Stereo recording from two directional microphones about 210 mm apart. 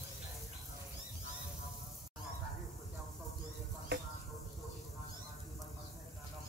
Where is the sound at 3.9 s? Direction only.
55° right (ahead or behind).